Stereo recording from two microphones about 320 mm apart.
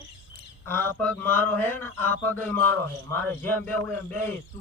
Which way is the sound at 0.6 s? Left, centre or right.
Centre.